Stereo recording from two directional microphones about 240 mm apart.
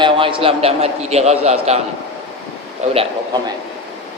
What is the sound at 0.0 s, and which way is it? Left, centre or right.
A man's voice, right.